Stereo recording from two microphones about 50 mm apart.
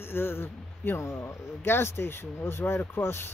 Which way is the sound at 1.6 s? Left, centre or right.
Left.